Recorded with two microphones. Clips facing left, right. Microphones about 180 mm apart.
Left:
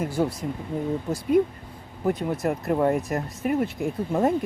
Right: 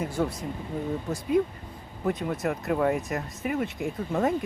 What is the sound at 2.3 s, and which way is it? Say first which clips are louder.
Speech: left 3 dB; 30° left (ahead or behind).